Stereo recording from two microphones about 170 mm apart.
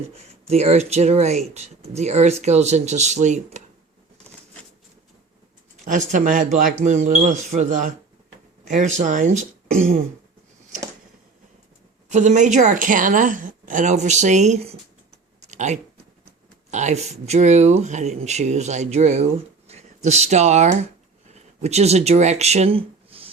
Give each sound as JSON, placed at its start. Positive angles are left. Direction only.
{"t": 0.4, "sound": "speech", "side_deg": -40}
{"t": 5.7, "sound": "a woman's voice", "side_deg": -50}
{"t": 12.0, "sound": "a woman's voice", "side_deg": -45}
{"t": 15.4, "sound": "a sound", "side_deg": -45}
{"t": 16.7, "sound": "speech", "side_deg": -45}